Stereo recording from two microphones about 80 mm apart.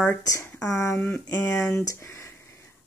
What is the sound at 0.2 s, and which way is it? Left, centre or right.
Speech, left.